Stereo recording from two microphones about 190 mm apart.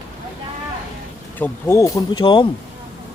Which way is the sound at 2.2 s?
25° left (ahead or behind).